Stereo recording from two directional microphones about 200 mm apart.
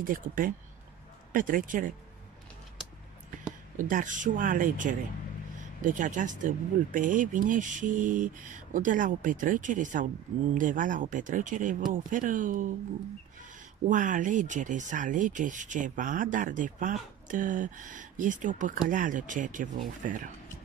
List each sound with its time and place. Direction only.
0.0 s speech: 45° right (ahead or behind)
3.7 s speech: 40° right (ahead or behind)
13.8 s speech: 40° right (ahead or behind)